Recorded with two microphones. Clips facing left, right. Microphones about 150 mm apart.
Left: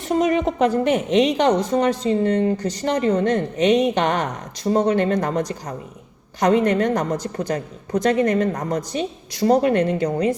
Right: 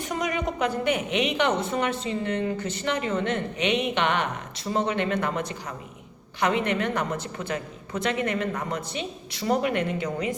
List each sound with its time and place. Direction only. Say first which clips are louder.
0.1 s a woman's voice: left 10 dB; 40° left (ahead or behind)